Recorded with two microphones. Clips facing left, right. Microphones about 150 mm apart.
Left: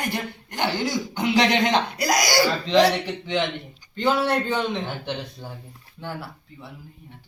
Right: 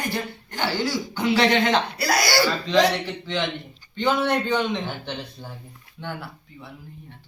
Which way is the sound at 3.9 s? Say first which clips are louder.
Even; 5° left (ahead or behind).